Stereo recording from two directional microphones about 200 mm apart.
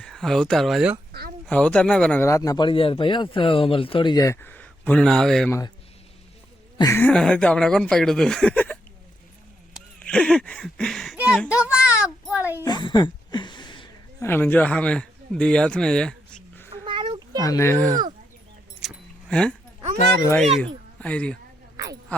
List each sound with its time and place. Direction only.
0.0 s speech: centre (ahead or behind)
6.7 s speech: 15° left (ahead or behind)
7.1 s speech: 5° left (ahead or behind)
10.0 s speech: 5° left (ahead or behind)
11.6 s a sound: 5° right (ahead or behind)
12.6 s a sound: 20° left (ahead or behind)
14.3 s speech: 10° left (ahead or behind)
16.8 s a sound: 25° right (ahead or behind)
17.4 s speech: 15° left (ahead or behind)
18.8 s keys jangling: centre (ahead or behind)
21.0 s speech: 5° left (ahead or behind)